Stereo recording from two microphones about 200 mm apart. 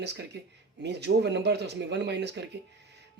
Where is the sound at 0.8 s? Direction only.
55° right (ahead or behind).